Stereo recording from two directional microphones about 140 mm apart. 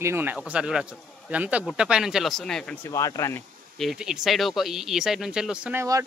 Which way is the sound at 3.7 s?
Centre (ahead or behind).